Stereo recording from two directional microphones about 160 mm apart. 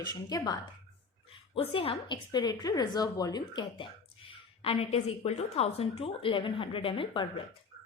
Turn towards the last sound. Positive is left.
turn(degrees=35)  # may be behind; listen again after turning